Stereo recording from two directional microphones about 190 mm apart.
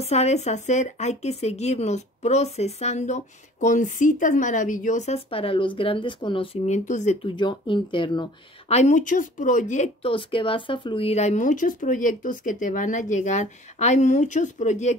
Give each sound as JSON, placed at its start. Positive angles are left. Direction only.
{"t": 0.0, "sound": "speech", "side_deg": 35}
{"t": 7.2, "sound": "speech", "side_deg": 25}
{"t": 8.7, "sound": "speech", "side_deg": 40}